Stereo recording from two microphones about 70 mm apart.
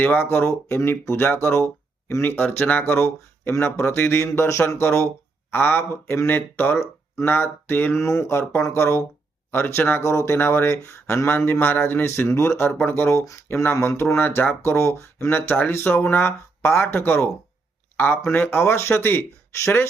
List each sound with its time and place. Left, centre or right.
0.0 s a man's voice: left
4.2 s a man's voice: left
8.3 s a man's voice: left
10.0 s a man's voice: left
15.3 s a man's voice: left